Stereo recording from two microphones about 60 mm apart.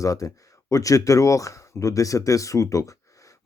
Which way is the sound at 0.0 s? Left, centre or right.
Left.